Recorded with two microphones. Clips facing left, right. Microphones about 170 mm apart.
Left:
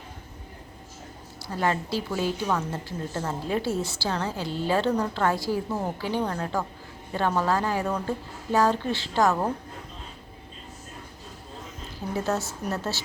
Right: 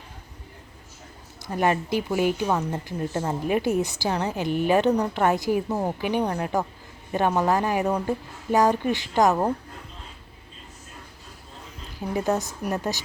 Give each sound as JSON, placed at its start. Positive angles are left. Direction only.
{"t": 1.5, "sound": "a woman's voice", "side_deg": -15}
{"t": 12.1, "sound": "a woman's voice", "side_deg": -15}